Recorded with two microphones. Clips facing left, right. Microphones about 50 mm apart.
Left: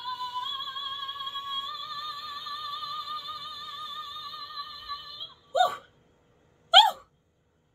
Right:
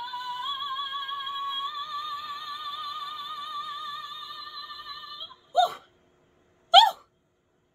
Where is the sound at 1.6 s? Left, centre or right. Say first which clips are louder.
Right 3 dB; centre.